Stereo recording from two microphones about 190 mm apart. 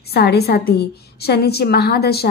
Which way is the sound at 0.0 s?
55° left (ahead or behind).